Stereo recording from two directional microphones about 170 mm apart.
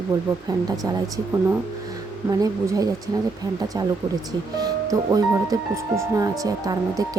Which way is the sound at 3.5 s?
20° right (ahead or behind).